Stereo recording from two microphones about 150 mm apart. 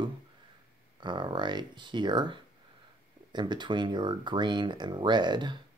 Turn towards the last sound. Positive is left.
turn(degrees=-30)  # may be behind; listen again after turning